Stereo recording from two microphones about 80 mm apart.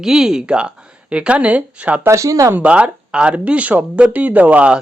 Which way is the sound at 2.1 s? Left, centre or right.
Right.